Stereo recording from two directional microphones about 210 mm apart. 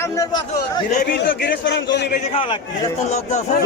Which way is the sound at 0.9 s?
45° left (ahead or behind).